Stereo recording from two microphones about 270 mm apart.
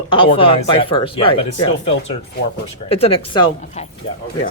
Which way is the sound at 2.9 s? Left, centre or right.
Left.